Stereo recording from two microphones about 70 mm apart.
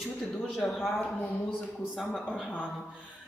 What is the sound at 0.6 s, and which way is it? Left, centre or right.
Speech, centre.